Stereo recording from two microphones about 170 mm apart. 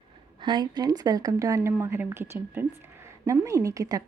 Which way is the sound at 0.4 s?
25° right (ahead or behind).